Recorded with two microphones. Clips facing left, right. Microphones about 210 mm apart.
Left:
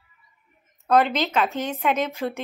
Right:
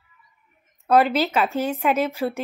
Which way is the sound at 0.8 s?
Centre (ahead or behind).